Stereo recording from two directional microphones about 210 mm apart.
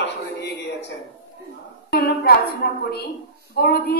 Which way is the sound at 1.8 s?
50° left (ahead or behind).